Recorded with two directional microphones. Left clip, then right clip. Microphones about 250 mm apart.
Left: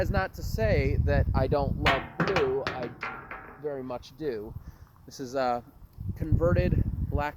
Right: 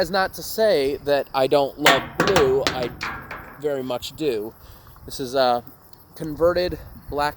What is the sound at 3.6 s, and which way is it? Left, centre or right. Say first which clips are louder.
Speech: right 10 dB; right.